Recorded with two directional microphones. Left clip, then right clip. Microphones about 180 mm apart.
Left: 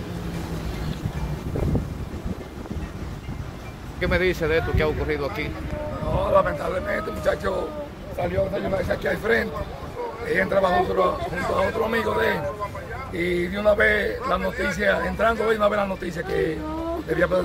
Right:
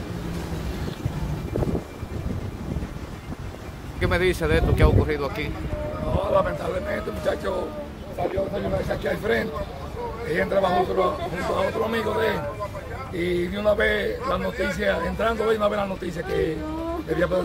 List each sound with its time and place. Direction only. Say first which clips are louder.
4.0 s a man's voice: even; centre (ahead or behind)
8.8 s a man's voice: left 2 dB; 5° right (ahead or behind)